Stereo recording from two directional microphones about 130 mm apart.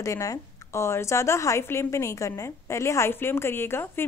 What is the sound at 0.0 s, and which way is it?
Speech, 25° left (ahead or behind).